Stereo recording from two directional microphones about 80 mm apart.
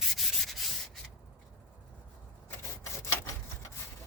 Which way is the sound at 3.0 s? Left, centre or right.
Left.